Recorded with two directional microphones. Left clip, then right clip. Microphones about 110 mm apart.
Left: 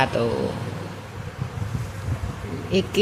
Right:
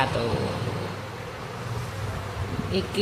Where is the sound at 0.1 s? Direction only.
45° left (ahead or behind).